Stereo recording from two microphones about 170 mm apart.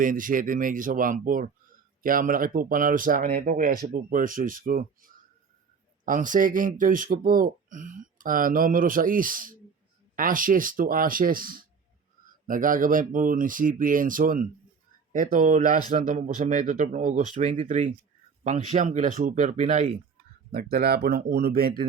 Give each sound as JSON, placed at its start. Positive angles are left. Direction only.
{"t": 0.0, "sound": "speech", "side_deg": -55}
{"t": 20.5, "sound": "speech", "side_deg": -60}